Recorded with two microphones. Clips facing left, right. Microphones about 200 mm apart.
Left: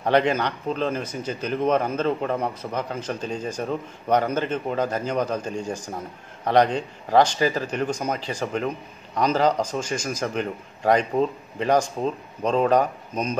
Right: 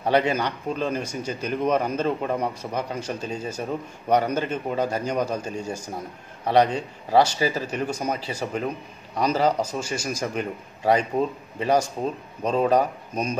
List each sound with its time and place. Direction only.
0.0 s speech: 10° right (ahead or behind)